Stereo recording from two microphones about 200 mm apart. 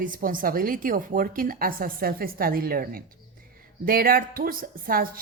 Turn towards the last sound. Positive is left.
turn(degrees=-45)  # may be behind; listen again after turning